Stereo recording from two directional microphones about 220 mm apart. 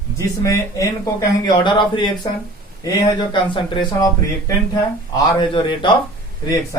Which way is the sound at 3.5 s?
20° left (ahead or behind).